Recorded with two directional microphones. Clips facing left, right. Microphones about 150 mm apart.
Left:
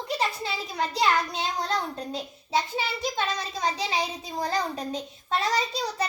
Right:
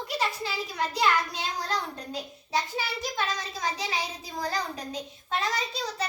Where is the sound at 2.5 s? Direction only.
25° left (ahead or behind).